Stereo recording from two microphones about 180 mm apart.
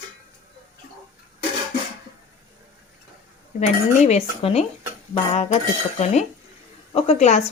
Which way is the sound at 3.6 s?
35° left (ahead or behind).